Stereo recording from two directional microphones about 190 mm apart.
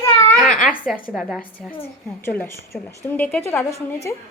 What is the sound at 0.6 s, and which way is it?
Speech, 5° left (ahead or behind).